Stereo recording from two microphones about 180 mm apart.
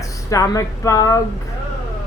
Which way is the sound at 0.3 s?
20° left (ahead or behind).